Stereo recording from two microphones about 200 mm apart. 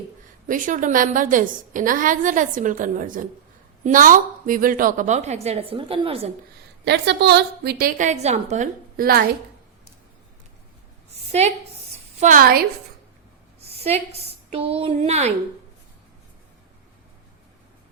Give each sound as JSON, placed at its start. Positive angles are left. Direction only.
{"t": 0.4, "sound": "a woman's voice", "side_deg": -40}
{"t": 6.8, "sound": "a woman's voice", "side_deg": -60}
{"t": 11.3, "sound": "a woman's voice", "side_deg": -35}
{"t": 12.2, "sound": "a woman's voice", "side_deg": -45}
{"t": 13.6, "sound": "a woman's voice", "side_deg": -30}